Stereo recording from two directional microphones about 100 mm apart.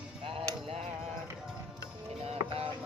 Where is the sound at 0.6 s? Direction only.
90° right.